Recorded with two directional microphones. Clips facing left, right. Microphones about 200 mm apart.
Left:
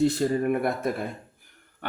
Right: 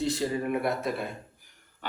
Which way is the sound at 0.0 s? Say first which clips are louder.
Left 6 dB; 55° left (ahead or behind).